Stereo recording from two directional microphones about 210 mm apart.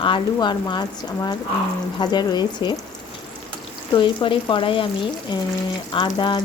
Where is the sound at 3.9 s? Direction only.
25° left (ahead or behind).